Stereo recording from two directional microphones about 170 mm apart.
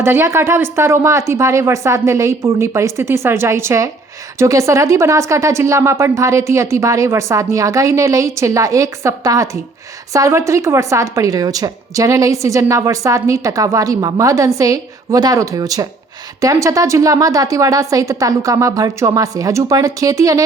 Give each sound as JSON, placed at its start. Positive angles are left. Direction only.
{"t": 0.0, "sound": "a woman's voice", "side_deg": -15}